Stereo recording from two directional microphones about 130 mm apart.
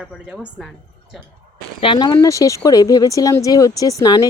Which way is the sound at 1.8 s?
35° left (ahead or behind).